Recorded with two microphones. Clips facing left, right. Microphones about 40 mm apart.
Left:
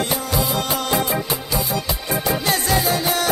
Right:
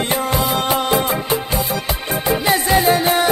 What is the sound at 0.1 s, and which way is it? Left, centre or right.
Music, right.